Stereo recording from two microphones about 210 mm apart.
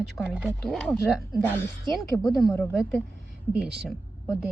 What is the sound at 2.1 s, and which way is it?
Speech, 15° left (ahead or behind).